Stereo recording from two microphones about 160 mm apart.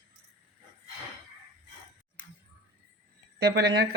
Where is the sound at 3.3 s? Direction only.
85° right.